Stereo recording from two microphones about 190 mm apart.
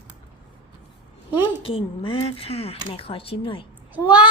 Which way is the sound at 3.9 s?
5° right (ahead or behind).